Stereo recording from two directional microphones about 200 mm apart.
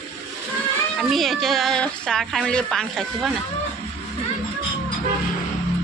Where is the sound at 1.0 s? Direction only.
Centre (ahead or behind).